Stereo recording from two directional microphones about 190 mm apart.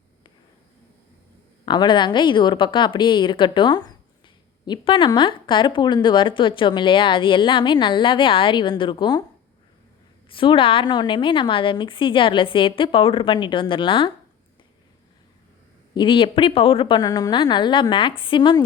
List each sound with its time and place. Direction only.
1.6 s speech: 25° left (ahead or behind)
10.2 s speech: 25° left (ahead or behind)
16.0 s speech: 25° left (ahead or behind)